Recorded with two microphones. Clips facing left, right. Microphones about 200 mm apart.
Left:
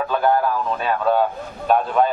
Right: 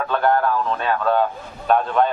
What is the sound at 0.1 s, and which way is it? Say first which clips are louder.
A man's voice: right 1 dB; 5° left (ahead or behind).